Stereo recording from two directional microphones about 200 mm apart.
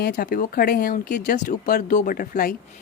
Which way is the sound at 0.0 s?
50° left (ahead or behind).